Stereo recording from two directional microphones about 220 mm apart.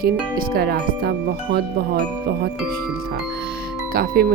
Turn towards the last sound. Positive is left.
turn(degrees=-45)  # may be behind; listen again after turning